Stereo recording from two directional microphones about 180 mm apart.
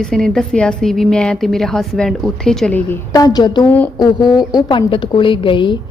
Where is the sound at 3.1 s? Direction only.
20° left (ahead or behind).